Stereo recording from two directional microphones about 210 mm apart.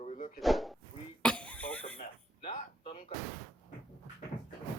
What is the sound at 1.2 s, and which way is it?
Cough, 5° left (ahead or behind).